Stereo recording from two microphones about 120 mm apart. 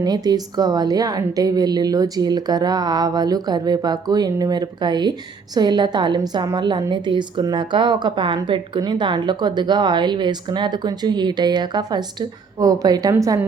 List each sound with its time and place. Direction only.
0.0 s a woman's voice: 35° right (ahead or behind)